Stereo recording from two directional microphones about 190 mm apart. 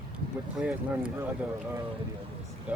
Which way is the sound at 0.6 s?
5° right (ahead or behind).